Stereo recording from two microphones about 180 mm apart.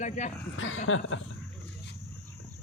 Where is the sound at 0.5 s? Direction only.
90° left.